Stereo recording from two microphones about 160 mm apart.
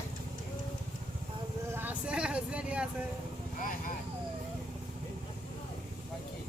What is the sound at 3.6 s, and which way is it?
Vehicle, 60° left (ahead or behind).